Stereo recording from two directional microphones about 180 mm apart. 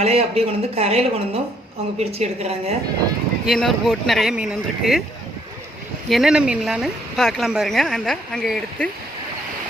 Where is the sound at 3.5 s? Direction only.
Centre (ahead or behind).